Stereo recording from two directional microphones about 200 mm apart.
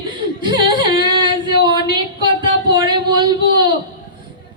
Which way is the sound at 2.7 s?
20° right (ahead or behind).